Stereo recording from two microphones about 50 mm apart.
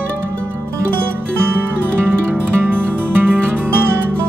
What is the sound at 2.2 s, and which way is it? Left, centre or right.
Music, right.